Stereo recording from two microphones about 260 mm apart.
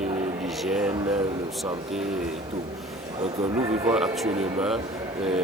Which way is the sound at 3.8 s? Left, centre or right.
Centre.